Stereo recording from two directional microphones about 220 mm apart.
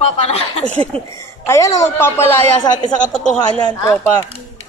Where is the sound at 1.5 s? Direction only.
15° left (ahead or behind).